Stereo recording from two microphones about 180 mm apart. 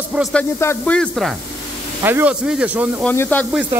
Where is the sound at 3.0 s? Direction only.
10° left (ahead or behind).